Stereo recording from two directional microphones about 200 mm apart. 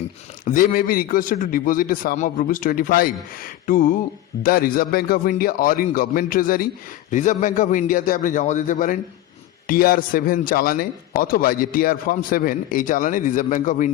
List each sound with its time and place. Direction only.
0.4 s a man's voice: 45° left (ahead or behind)